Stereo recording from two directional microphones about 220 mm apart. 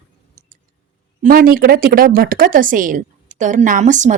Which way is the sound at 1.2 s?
40° right (ahead or behind).